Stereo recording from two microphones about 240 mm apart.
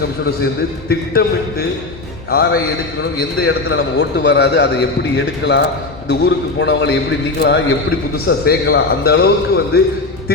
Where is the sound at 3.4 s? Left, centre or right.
Left.